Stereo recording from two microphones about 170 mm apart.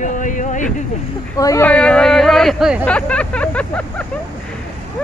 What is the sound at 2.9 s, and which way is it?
Speech, 5° left (ahead or behind).